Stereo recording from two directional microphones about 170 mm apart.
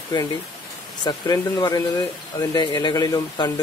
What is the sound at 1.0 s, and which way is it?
Speech, 25° left (ahead or behind).